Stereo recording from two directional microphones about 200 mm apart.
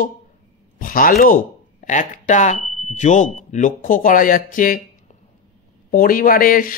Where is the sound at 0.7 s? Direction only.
45° left (ahead or behind).